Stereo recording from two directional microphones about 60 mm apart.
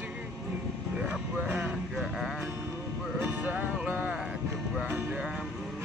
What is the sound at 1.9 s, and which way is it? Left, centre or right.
Music, centre.